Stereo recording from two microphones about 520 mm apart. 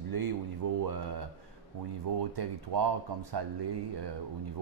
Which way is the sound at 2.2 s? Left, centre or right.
Right.